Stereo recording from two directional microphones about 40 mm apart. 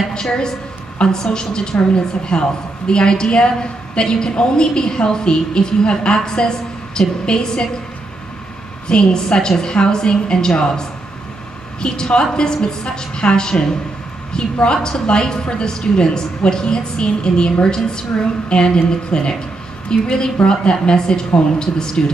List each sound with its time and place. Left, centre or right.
0.1 s a woman's voice: centre
8.8 s a woman's voice: left